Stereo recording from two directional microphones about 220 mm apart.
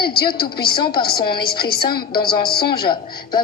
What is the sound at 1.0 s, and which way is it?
Speech, 45° left (ahead or behind).